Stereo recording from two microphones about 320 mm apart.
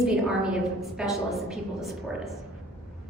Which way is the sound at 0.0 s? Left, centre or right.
Centre.